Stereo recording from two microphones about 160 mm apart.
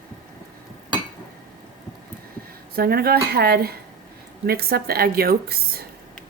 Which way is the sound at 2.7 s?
70° right (ahead or behind).